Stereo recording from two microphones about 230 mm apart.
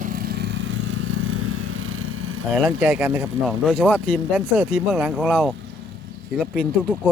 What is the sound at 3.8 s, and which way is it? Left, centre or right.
Speech, centre.